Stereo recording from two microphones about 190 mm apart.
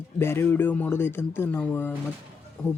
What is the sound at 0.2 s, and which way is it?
Speech, 10° left (ahead or behind).